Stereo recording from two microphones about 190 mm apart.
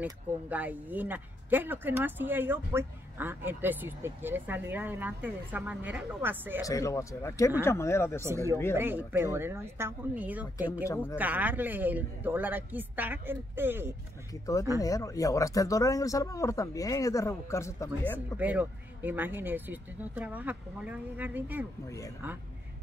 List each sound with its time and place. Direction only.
0.0 s speech: 10° right (ahead or behind)
6.6 s speech: 15° left (ahead or behind)
8.2 s speech: 15° right (ahead or behind)
10.9 s speech: 15° left (ahead or behind)
11.1 s speech: 10° right (ahead or behind)
14.4 s speech: 15° left (ahead or behind)
18.4 s speech: 10° right (ahead or behind)
21.8 s speech: 15° left (ahead or behind)